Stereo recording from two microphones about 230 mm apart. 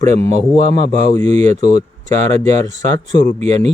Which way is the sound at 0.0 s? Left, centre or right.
Right.